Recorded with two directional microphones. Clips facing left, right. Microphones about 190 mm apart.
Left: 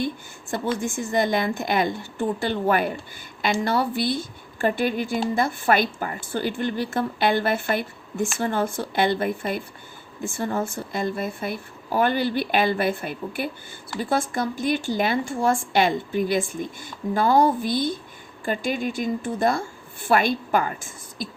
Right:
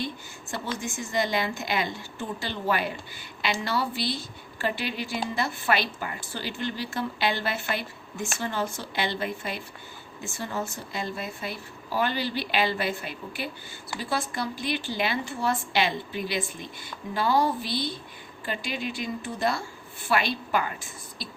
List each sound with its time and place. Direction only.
0.5 s a woman's voice: 50° left (ahead or behind)